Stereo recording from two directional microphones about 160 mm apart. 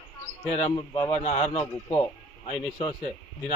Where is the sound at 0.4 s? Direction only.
35° left (ahead or behind).